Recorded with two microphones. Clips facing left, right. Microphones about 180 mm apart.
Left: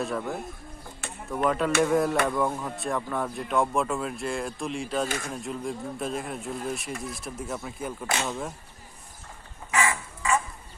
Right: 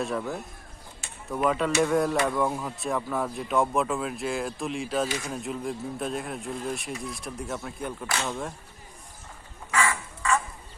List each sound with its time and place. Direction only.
0.0 s speech: centre (ahead or behind)
5.0 s speech: 50° left (ahead or behind)
5.3 s speech: centre (ahead or behind)
9.7 s bird: 15° left (ahead or behind)